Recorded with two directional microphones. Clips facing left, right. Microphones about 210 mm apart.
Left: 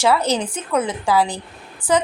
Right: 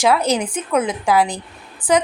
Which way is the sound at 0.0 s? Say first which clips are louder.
Right 1 dB; 15° right (ahead or behind).